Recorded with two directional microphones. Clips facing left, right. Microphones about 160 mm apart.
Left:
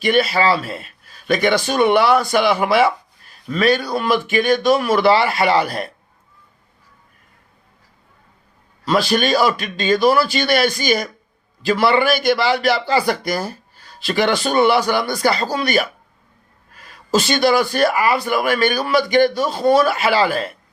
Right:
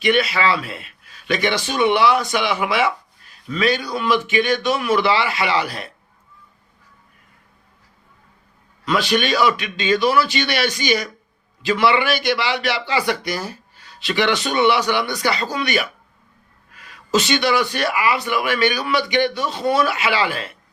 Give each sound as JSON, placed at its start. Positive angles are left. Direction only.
{"t": 0.0, "sound": "speech", "side_deg": 40}
{"t": 8.8, "sound": "speech", "side_deg": 35}